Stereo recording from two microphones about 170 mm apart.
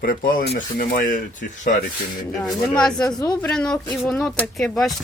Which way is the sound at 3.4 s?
5° left (ahead or behind).